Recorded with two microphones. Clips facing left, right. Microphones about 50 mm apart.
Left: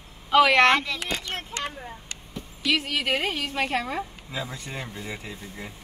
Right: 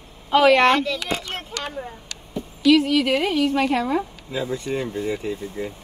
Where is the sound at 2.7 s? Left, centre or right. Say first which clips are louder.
Right 8 dB; left.